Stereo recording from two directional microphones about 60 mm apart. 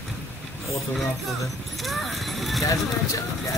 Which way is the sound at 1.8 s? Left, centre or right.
Centre.